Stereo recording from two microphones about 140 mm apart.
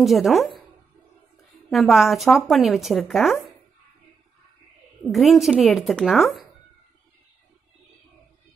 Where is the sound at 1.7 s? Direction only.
Centre (ahead or behind).